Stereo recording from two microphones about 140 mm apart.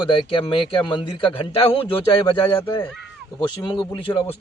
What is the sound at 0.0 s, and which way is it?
Speech, 35° left (ahead or behind).